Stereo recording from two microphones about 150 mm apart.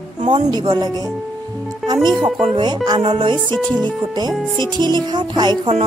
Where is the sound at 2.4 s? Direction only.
35° right (ahead or behind).